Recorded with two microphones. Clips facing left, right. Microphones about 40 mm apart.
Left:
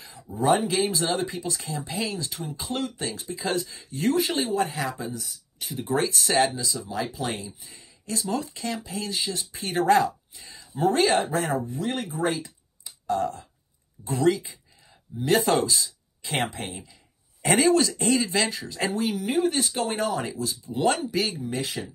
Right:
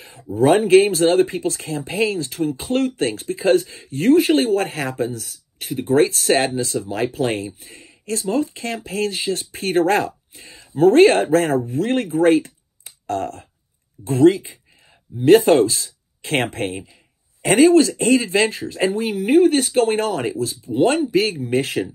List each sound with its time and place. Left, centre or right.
0.4 s speech: right
0.8 s speech: right
8.3 s speech: right
8.6 s speech: right
10.8 s speech: right
14.0 s speech: right
17.4 s speech: right
21.3 s speech: right